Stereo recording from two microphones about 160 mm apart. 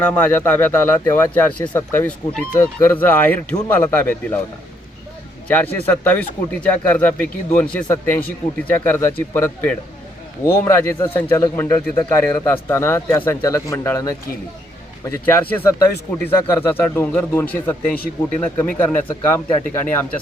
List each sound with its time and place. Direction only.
0.0 s speech: 10° left (ahead or behind)
5.5 s speech: 10° left (ahead or behind)